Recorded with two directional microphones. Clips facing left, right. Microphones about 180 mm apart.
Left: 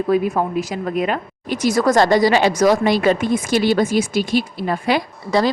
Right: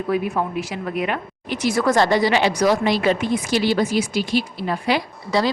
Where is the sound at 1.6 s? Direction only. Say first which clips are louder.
Left 3 dB; 40° left (ahead or behind).